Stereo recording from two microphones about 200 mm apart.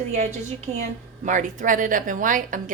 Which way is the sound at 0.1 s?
35° right (ahead or behind).